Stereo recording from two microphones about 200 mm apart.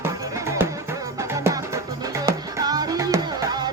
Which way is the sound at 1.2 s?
15° right (ahead or behind).